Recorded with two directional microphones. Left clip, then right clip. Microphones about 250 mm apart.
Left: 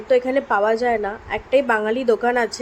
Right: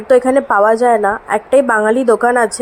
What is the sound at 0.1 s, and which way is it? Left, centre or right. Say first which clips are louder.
A woman's voice: right 7 dB; centre.